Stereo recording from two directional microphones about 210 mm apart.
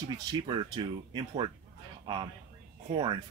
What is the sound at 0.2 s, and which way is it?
Speech, 20° right (ahead or behind).